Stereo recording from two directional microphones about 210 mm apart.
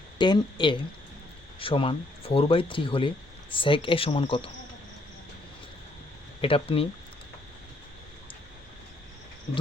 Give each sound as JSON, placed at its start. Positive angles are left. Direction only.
{"t": 0.2, "sound": "speech", "side_deg": 20}
{"t": 6.4, "sound": "speech", "side_deg": 25}